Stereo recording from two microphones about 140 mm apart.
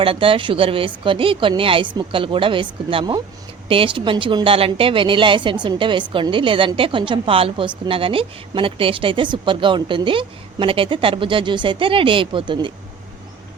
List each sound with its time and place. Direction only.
0.0 s a woman's voice: 40° right (ahead or behind)